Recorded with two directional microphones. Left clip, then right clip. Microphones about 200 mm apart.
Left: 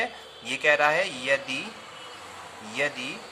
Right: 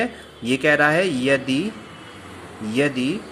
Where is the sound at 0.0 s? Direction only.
15° right (ahead or behind).